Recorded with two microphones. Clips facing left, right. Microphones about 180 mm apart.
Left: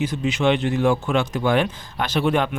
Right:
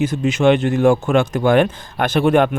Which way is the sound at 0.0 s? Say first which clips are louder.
Right 5 dB; 45° right (ahead or behind).